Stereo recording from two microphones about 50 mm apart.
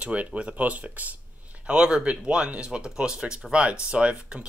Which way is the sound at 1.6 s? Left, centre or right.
Centre.